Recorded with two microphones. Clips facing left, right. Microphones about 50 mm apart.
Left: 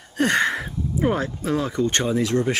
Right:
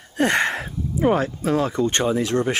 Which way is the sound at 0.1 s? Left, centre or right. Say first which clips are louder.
Right 1 dB; centre.